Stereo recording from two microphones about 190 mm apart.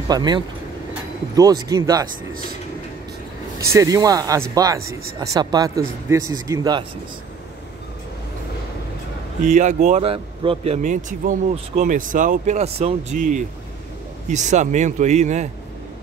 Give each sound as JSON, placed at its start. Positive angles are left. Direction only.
{"t": 0.1, "sound": "speech", "side_deg": -20}
{"t": 3.5, "sound": "speech", "side_deg": -15}
{"t": 9.4, "sound": "speech", "side_deg": -40}